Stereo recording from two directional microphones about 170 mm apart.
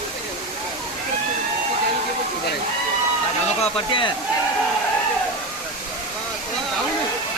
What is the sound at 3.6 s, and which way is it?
Speech, 30° left (ahead or behind).